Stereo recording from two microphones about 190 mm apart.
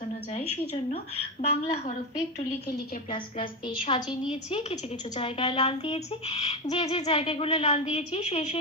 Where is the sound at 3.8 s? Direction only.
30° left (ahead or behind).